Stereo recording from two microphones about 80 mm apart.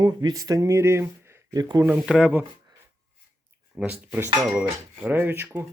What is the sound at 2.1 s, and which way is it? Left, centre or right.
Speech, centre.